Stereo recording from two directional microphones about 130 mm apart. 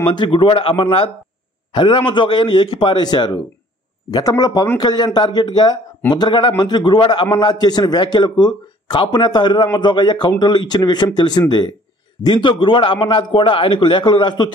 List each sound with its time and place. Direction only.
0.0 s a man's voice: 35° left (ahead or behind)